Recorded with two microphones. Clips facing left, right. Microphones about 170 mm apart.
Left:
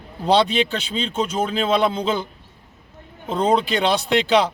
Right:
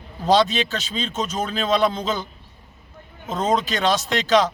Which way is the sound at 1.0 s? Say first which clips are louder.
Left 5 dB; 10° left (ahead or behind).